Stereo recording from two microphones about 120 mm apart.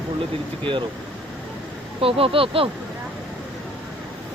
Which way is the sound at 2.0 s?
50° right (ahead or behind).